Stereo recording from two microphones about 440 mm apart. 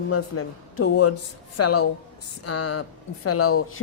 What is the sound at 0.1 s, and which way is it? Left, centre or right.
A woman's voice, left.